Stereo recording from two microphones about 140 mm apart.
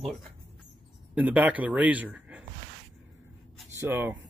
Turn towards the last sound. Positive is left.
turn(degrees=-15)  # may be behind; listen again after turning